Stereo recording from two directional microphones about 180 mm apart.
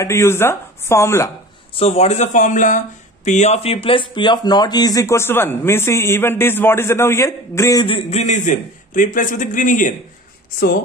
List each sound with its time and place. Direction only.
0.0 s speech: 15° left (ahead or behind)
1.8 s speech: 35° left (ahead or behind); by 7.8 s 15° left (ahead or behind)
7.8 s a man's voice: 35° left (ahead or behind)